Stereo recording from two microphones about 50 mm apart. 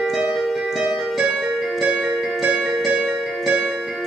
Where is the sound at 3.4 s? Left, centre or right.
Centre.